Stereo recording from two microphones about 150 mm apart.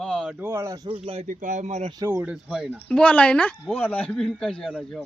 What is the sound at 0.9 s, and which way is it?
Speech, 40° right (ahead or behind).